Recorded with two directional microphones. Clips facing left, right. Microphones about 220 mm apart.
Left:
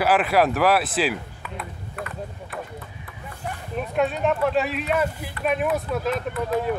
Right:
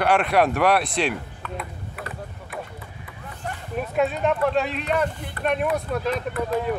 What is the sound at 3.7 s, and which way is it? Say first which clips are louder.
Speech: even; centre (ahead or behind).